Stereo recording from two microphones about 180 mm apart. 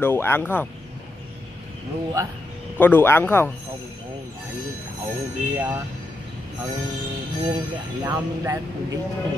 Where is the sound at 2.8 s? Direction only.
10° left (ahead or behind).